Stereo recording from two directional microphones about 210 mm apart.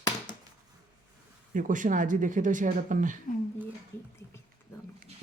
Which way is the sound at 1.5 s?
40° right (ahead or behind).